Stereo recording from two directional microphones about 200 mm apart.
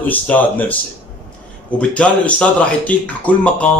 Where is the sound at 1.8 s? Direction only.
5° left (ahead or behind).